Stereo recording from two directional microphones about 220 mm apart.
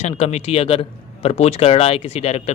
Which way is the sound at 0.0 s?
30° left (ahead or behind).